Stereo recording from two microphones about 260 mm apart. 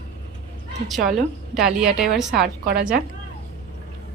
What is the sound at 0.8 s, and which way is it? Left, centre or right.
A woman's voice, centre.